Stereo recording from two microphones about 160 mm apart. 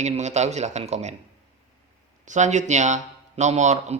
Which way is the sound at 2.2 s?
50° right (ahead or behind).